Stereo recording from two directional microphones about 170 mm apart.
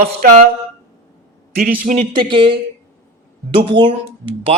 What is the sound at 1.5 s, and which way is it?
Speech, 65° right (ahead or behind).